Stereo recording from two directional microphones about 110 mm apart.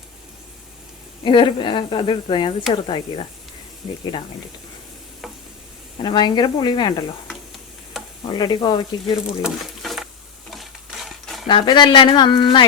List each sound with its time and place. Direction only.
1.2 s a woman's voice: 50° left (ahead or behind)
6.0 s a woman's voice: 45° left (ahead or behind)
7.9 s stir: centre (ahead or behind)
8.3 s speech: 40° left (ahead or behind)
9.4 s a sound: centre (ahead or behind)
11.4 s a woman's voice: 45° left (ahead or behind)